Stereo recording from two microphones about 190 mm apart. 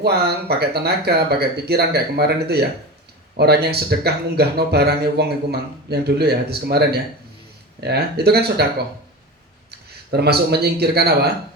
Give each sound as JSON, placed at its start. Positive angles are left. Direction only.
{"t": 0.0, "sound": "speech", "side_deg": -55}
{"t": 10.1, "sound": "speech", "side_deg": -60}